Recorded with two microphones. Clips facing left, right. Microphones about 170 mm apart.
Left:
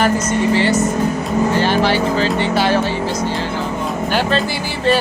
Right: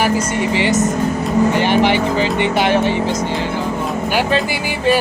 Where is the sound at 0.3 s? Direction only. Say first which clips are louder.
Left 2 dB; 15° right (ahead or behind).